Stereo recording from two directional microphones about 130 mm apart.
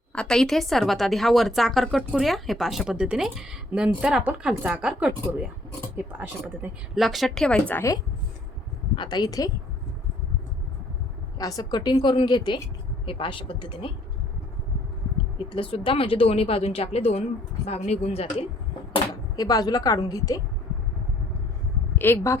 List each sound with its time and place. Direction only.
0.1 s a woman's voice: 5° left (ahead or behind); by 6.7 s 15° right (ahead or behind)
6.9 s a woman's voice: centre (ahead or behind); by 7.9 s 15° left (ahead or behind)
9.0 s speech: 30° left (ahead or behind)
11.3 s a woman's voice: 30° left (ahead or behind)
15.4 s a woman's voice: 40° left (ahead or behind)
19.4 s a woman's voice: 30° left (ahead or behind)
21.9 s speech: 15° left (ahead or behind)